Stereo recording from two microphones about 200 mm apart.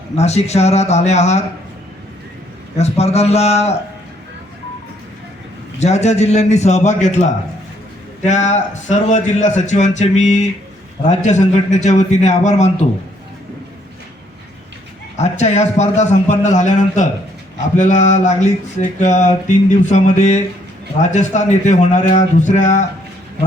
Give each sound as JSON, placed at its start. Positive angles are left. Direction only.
{"t": 0.2, "sound": "a man's voice", "side_deg": 35}
{"t": 2.7, "sound": "a man's voice", "side_deg": 30}
{"t": 5.8, "sound": "a man's voice", "side_deg": 35}
{"t": 15.2, "sound": "a man's voice", "side_deg": 35}